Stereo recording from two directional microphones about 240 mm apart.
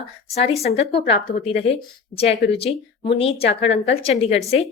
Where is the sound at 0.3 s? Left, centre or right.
Left.